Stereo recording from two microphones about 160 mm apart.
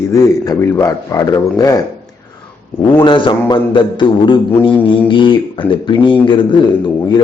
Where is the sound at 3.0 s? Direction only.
30° left (ahead or behind).